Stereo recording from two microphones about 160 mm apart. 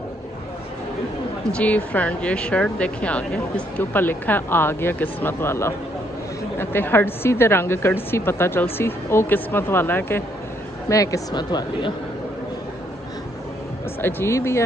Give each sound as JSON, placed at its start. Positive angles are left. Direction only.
{"t": 1.5, "sound": "speech", "side_deg": 10}
{"t": 14.0, "sound": "speech", "side_deg": 15}